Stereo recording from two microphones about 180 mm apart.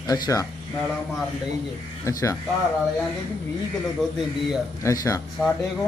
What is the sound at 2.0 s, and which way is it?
Speech, 20° left (ahead or behind).